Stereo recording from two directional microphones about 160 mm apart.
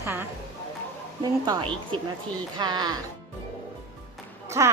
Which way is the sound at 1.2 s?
30° right (ahead or behind).